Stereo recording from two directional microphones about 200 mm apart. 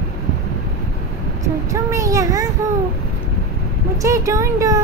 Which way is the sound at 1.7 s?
15° right (ahead or behind).